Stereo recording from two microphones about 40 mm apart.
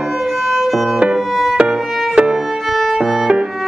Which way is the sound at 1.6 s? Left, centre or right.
Centre.